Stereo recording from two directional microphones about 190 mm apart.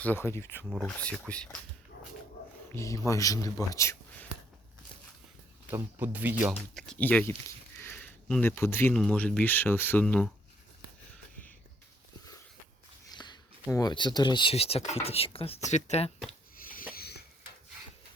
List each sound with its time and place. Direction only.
0.0 s speech: 10° left (ahead or behind)
2.7 s speech: 15° left (ahead or behind)
5.7 s speech: 10° right (ahead or behind)
6.7 s speech: 5° left (ahead or behind)
13.1 s speech: 20° left (ahead or behind)
16.9 s dishes: 55° left (ahead or behind)